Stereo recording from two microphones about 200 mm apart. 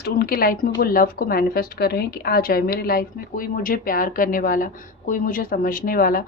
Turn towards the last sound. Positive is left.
turn(degrees=45)  # may be behind; listen again after turning